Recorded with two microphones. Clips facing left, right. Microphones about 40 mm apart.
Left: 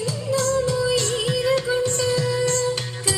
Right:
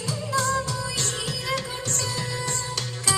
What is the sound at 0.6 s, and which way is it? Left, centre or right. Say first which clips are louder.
Music: left 9 dB; left.